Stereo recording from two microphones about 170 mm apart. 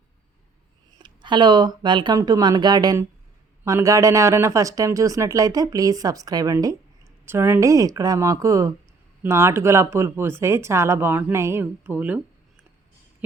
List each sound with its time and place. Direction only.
0.9 s a woman's voice: 25° right (ahead or behind); by 12.2 s 10° right (ahead or behind)